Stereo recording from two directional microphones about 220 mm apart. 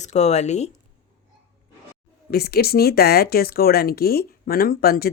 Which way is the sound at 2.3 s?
45° left (ahead or behind).